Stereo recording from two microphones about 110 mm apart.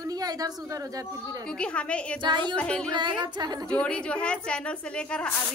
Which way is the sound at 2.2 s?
45° right (ahead or behind).